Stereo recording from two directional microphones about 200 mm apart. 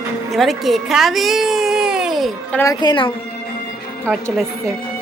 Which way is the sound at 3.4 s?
50° left (ahead or behind).